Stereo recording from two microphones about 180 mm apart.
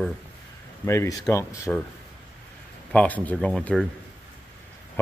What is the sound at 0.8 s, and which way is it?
Speech, 15° left (ahead or behind).